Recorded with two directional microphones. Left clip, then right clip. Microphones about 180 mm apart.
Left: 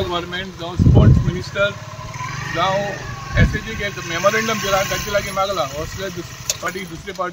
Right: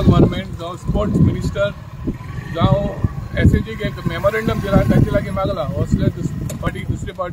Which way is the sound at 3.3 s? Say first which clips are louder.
Right 1 dB; 30° right (ahead or behind).